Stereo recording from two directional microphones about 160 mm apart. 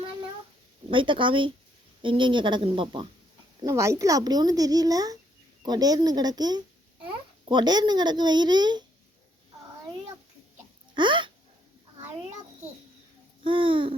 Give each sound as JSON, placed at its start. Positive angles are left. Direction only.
{"t": 0.9, "sound": "a woman's voice", "side_deg": -30}
{"t": 3.6, "sound": "speech", "side_deg": -20}
{"t": 10.9, "sound": "a woman's voice", "side_deg": -30}
{"t": 13.4, "sound": "a woman's voice", "side_deg": -30}